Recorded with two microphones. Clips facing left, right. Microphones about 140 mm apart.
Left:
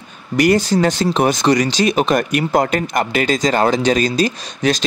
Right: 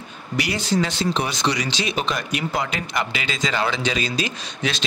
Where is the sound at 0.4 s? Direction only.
45° left (ahead or behind).